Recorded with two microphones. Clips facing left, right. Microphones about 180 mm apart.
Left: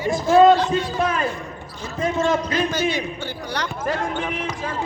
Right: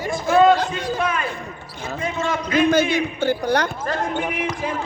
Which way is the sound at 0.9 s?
40° left (ahead or behind).